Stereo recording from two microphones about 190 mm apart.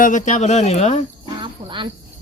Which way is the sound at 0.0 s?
40° left (ahead or behind).